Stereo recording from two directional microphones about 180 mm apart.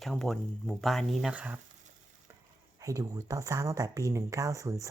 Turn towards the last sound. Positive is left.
turn(degrees=-20)  # may be behind; listen again after turning